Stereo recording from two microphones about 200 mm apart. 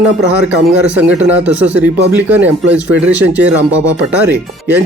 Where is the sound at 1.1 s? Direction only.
10° right (ahead or behind).